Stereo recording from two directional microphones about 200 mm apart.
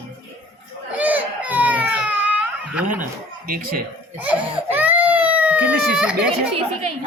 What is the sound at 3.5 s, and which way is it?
Speech, 45° right (ahead or behind).